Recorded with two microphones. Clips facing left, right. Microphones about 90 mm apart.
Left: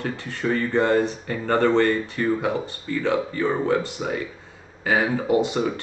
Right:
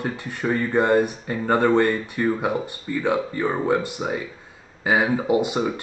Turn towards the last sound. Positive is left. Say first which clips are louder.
# even
turn(degrees=-15)  # may be behind; listen again after turning